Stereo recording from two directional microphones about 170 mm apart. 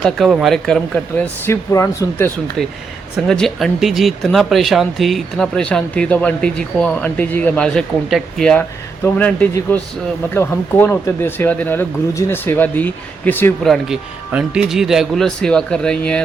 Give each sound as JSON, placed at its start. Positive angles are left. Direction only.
{"t": 0.0, "sound": "speech", "side_deg": 0}
{"t": 1.2, "sound": "speech", "side_deg": 15}
{"t": 2.6, "sound": "speech", "side_deg": 0}
{"t": 13.7, "sound": "speech", "side_deg": -5}